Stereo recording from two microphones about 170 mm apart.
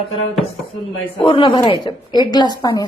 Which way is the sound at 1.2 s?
30° left (ahead or behind).